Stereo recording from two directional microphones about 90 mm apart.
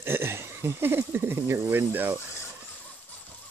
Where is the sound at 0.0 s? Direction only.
25° right (ahead or behind).